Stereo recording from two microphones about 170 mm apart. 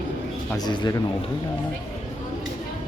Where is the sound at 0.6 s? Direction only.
25° left (ahead or behind).